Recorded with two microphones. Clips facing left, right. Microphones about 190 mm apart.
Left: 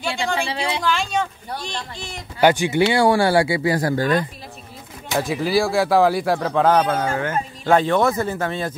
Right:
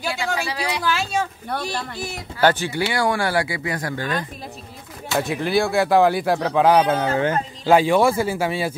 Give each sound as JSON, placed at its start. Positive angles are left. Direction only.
{"t": 0.1, "sound": "speech", "side_deg": 25}
{"t": 0.8, "sound": "speech", "side_deg": -5}
{"t": 2.4, "sound": "speech", "side_deg": 15}
{"t": 5.2, "sound": "speech", "side_deg": 0}